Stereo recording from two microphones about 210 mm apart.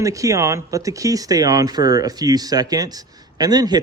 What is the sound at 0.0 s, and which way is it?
A man's voice, 15° right (ahead or behind).